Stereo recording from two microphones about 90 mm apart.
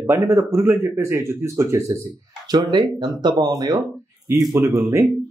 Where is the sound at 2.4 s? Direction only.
50° right (ahead or behind).